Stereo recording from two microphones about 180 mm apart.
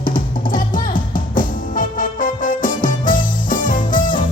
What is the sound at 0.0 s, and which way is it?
Music, 50° left (ahead or behind).